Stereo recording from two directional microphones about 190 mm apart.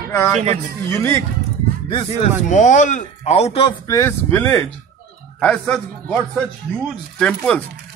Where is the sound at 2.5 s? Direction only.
40° left (ahead or behind).